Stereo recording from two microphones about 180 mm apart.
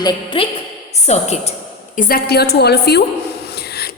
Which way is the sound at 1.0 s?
35° left (ahead or behind).